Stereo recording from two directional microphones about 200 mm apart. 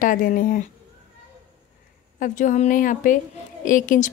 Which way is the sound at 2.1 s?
40° left (ahead or behind).